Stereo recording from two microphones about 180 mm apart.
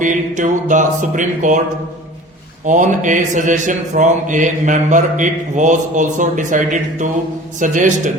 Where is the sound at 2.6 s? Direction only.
45° right (ahead or behind).